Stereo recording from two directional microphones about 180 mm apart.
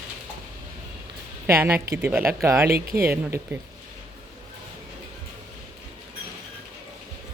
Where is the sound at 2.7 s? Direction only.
55° right (ahead or behind).